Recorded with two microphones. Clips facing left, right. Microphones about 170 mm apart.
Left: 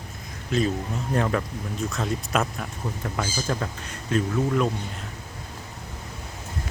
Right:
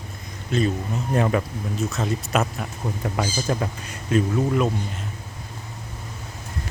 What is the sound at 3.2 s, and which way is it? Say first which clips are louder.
Speech: right 3 dB; 15° right (ahead or behind).